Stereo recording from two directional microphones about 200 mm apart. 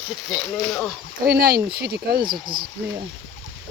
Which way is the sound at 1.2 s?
15° right (ahead or behind).